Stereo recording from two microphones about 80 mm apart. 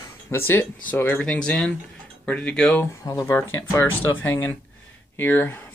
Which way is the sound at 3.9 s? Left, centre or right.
Left.